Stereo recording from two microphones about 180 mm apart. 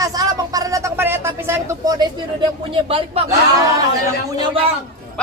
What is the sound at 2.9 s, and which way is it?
Speech, 30° right (ahead or behind).